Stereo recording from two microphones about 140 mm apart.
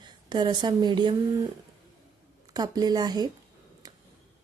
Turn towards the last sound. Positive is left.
turn(degrees=-25)  # may be behind; listen again after turning